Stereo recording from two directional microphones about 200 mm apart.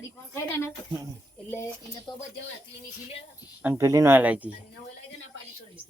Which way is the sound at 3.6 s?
10° right (ahead or behind).